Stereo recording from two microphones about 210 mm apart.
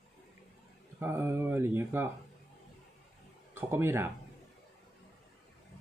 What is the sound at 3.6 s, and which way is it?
Speech, 10° right (ahead or behind).